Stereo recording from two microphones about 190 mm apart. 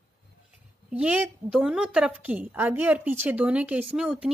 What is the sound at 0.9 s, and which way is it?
A woman's voice, 5° right (ahead or behind).